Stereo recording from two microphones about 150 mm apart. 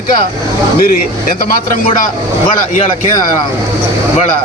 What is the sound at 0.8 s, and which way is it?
Speech, 75° left (ahead or behind).